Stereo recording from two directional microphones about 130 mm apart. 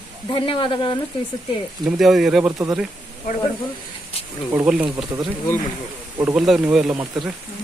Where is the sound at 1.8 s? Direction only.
Centre (ahead or behind).